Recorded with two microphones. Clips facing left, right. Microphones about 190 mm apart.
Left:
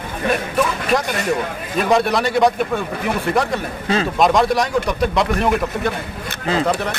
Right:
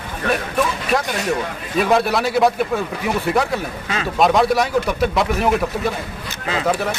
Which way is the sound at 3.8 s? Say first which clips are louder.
Left 5 dB; 35° left (ahead or behind).